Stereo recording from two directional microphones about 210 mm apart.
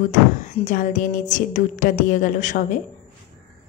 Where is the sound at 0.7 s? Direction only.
40° left (ahead or behind).